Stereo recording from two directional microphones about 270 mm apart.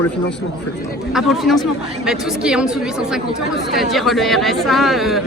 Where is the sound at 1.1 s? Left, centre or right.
Centre.